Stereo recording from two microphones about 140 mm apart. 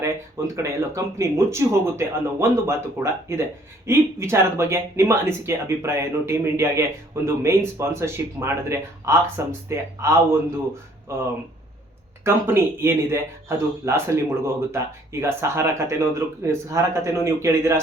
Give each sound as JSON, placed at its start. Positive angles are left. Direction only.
{"t": 0.0, "sound": "speech", "side_deg": -20}
{"t": 12.2, "sound": "speech", "side_deg": -15}